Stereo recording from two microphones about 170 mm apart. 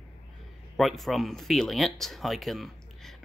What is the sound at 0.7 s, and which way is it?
Speech, centre (ahead or behind).